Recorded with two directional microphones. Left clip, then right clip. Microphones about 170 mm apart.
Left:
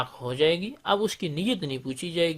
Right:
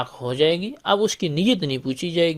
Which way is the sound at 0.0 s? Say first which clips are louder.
Right 4 dB; 35° right (ahead or behind).